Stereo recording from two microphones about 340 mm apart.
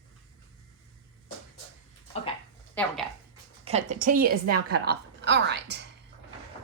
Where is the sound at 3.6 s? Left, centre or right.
Centre.